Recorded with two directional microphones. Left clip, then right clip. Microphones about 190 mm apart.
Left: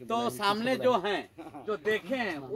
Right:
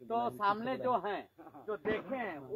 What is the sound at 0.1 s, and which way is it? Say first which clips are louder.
Speech: left 4 dB; 55° left (ahead or behind).